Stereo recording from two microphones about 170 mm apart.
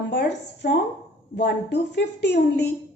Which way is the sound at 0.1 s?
85° left.